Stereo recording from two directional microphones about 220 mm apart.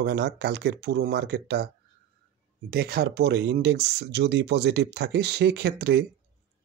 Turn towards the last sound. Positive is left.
turn(degrees=-45)  # may be behind; listen again after turning